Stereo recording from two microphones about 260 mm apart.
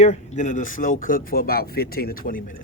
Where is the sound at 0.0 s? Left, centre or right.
Left.